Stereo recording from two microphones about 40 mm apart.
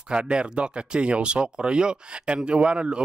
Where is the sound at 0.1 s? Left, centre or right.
Right.